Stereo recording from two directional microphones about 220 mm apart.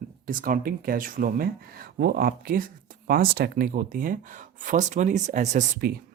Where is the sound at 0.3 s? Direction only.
40° right (ahead or behind).